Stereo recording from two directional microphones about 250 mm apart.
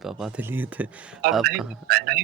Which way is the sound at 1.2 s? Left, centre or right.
Right.